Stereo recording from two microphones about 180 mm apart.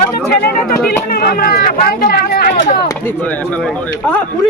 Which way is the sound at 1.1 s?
55° left (ahead or behind).